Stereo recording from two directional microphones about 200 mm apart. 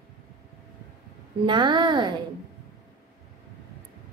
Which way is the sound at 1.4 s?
25° right (ahead or behind).